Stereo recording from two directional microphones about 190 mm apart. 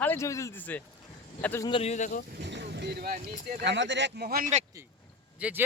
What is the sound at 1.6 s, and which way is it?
Speech, 30° left (ahead or behind).